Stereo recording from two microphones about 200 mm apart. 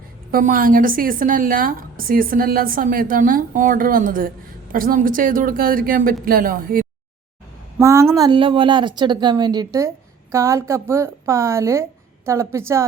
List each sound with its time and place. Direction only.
0.3 s a woman's voice: 45° right (ahead or behind)
7.8 s speech: 15° right (ahead or behind)